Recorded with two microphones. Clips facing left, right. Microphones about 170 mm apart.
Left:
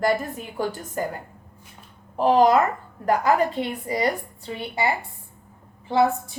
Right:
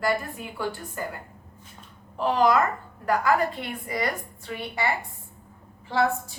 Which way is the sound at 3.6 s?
25° left (ahead or behind).